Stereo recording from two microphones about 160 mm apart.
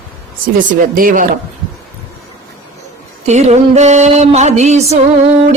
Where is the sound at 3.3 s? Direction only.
45° right (ahead or behind).